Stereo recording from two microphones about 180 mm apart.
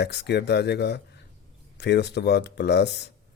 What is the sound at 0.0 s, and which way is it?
Speech, 70° left (ahead or behind).